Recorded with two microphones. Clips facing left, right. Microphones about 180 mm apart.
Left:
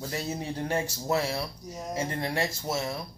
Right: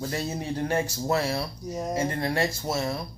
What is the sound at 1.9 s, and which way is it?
Speech, 20° left (ahead or behind).